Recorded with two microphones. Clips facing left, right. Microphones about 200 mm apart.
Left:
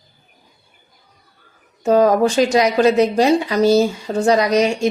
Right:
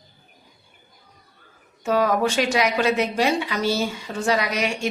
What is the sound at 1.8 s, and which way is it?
A woman's voice, 35° left (ahead or behind).